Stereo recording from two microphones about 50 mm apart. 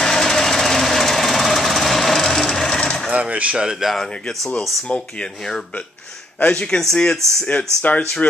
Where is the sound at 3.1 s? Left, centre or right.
Right.